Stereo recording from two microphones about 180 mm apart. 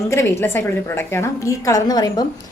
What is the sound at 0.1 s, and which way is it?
A woman's voice, 15° left (ahead or behind).